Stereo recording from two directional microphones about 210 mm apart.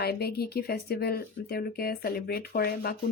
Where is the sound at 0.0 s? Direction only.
50° left (ahead or behind).